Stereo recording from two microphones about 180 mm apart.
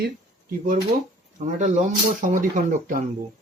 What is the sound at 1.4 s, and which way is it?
Speech, 45° right (ahead or behind).